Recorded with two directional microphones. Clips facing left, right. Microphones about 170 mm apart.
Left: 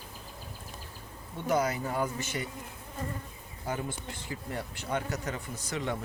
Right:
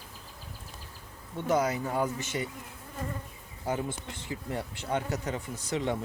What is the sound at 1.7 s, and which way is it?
Speech, 20° right (ahead or behind).